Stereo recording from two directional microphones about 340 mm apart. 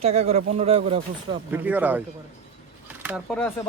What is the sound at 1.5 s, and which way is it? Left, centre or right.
Speech, centre.